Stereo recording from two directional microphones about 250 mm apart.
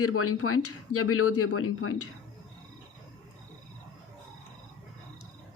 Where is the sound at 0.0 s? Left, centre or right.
Left.